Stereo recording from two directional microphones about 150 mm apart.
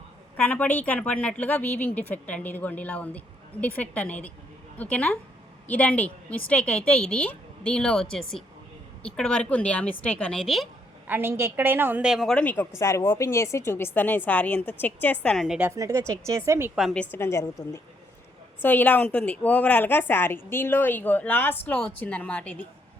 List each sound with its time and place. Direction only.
0.3 s speech: 10° left (ahead or behind)
9.0 s speech: 5° left (ahead or behind)
11.0 s a woman's voice: 15° right (ahead or behind)
15.7 s speech: 20° right (ahead or behind)
16.7 s a woman's voice: centre (ahead or behind)
17.0 s speech: 15° left (ahead or behind)
18.6 s speech: 10° left (ahead or behind)